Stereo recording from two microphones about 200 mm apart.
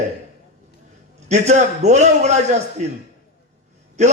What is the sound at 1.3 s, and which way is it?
A man's voice, 35° right (ahead or behind).